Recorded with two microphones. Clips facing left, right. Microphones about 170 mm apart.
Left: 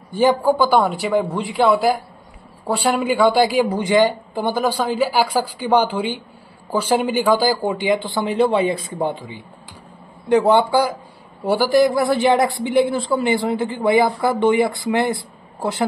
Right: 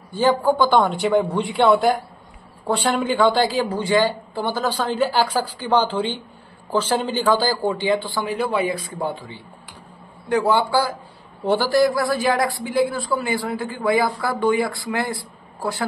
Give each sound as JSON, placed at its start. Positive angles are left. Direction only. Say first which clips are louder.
{"t": 0.1, "sound": "a man's voice", "louder": "left 2 dB", "side_deg": 15}